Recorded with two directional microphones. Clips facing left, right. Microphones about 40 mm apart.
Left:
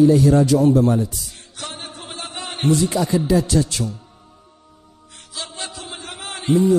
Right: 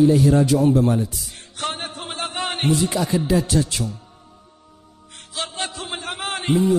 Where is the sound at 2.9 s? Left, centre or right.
Right.